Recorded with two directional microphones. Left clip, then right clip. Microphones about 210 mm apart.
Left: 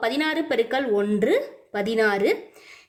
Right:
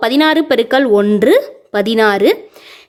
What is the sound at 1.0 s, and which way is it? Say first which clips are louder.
Speech: right 11 dB; 45° right (ahead or behind).